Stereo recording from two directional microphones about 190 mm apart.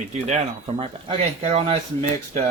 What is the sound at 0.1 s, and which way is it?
Speech, 35° right (ahead or behind).